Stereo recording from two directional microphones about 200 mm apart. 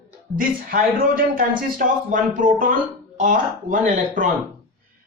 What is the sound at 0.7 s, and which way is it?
A man's voice, 45° right (ahead or behind).